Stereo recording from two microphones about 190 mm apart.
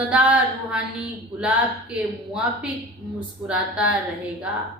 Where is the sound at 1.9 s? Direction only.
5° right (ahead or behind).